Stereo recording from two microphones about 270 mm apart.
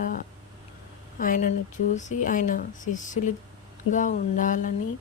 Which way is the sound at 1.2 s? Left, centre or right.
Left.